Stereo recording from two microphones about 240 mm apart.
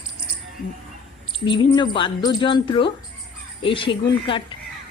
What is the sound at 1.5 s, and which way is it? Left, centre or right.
Speech, centre.